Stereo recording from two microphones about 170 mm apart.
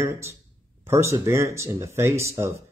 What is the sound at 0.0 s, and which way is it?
Speech, 15° right (ahead or behind).